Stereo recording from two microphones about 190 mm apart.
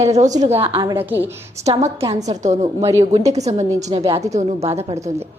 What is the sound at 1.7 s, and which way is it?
Speech, 35° right (ahead or behind).